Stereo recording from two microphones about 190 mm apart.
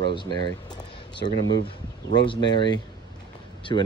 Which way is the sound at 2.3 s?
25° left (ahead or behind).